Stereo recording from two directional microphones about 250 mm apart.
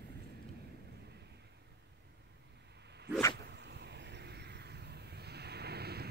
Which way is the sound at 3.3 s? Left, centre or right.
Right.